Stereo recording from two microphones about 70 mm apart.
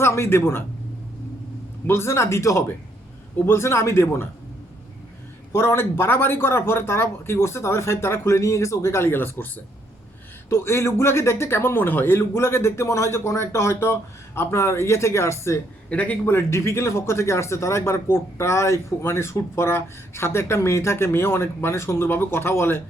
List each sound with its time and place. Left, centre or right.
0.0 s speech: left
1.9 s speech: left
5.5 s speech: left
10.5 s speech: left
15.9 s a man's voice: left
16.2 s speech: left